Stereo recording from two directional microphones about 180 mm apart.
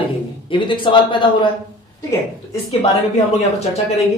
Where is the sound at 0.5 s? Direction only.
25° left (ahead or behind).